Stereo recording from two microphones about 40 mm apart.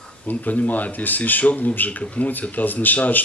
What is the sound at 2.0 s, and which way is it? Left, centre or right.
Speech, left.